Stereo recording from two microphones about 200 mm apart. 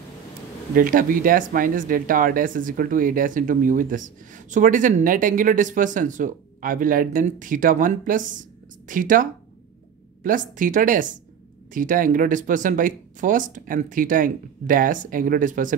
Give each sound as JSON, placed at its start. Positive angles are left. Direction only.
{"t": 0.7, "sound": "speech", "side_deg": -45}